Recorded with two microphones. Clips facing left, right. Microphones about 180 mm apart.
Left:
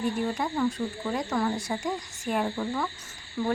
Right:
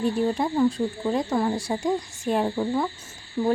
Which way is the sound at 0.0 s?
30° right (ahead or behind).